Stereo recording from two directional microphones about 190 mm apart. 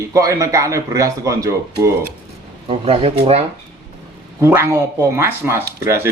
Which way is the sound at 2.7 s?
30° right (ahead or behind).